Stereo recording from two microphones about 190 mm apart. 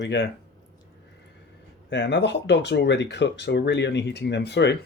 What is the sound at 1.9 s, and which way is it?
Speech, 65° left (ahead or behind).